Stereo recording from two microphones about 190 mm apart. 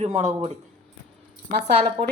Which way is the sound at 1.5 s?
30° right (ahead or behind).